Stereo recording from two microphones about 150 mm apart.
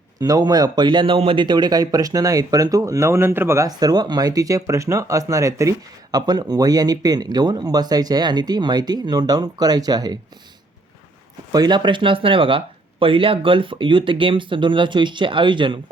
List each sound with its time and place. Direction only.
0.2 s a man's voice: 25° right (ahead or behind)
11.5 s speech: 25° right (ahead or behind)